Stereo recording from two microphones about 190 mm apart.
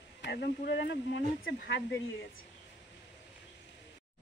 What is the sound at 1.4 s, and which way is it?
Speech, 65° left (ahead or behind).